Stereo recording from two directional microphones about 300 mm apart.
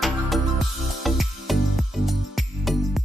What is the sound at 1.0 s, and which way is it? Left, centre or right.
Music, centre.